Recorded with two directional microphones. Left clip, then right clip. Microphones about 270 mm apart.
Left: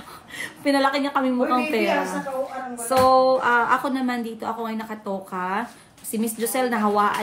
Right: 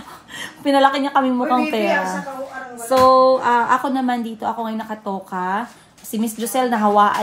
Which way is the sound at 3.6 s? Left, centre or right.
Centre.